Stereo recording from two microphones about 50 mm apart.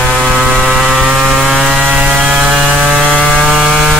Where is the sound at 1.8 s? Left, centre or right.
Right.